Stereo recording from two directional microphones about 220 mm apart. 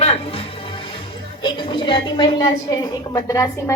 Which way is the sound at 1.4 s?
20° left (ahead or behind).